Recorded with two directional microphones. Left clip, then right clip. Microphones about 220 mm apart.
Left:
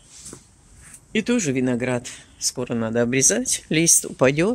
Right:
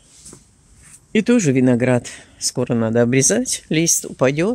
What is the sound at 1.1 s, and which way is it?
Speech, 25° right (ahead or behind).